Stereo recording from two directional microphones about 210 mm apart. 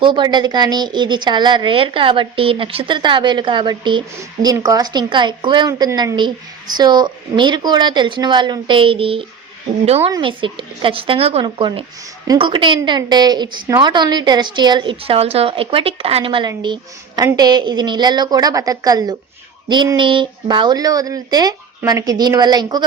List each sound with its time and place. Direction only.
0.0 s a woman's voice: 20° right (ahead or behind)